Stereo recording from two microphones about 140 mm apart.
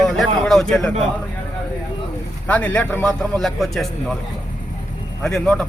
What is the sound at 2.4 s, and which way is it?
A man's voice, 10° left (ahead or behind).